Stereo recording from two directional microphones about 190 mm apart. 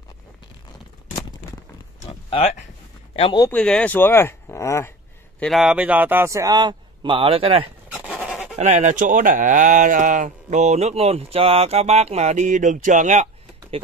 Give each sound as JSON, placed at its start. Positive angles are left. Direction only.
{"t": 2.0, "sound": "a sound", "side_deg": 30}
{"t": 3.2, "sound": "speech", "side_deg": 25}
{"t": 3.4, "sound": "speech", "side_deg": 5}
{"t": 5.4, "sound": "a man's voice", "side_deg": 0}
{"t": 7.9, "sound": "goat", "side_deg": -5}
{"t": 8.5, "sound": "speech", "side_deg": -40}